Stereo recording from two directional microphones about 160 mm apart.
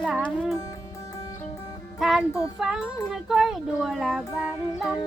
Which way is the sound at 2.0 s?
Centre (ahead or behind).